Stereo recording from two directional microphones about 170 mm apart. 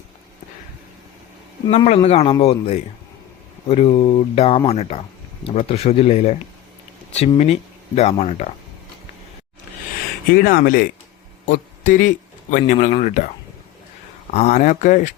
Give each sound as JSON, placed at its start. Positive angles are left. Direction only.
{"t": 1.7, "sound": "speech", "side_deg": 40}
{"t": 7.3, "sound": "speech", "side_deg": 40}
{"t": 10.3, "sound": "speech", "side_deg": 55}
{"t": 14.3, "sound": "speech", "side_deg": 40}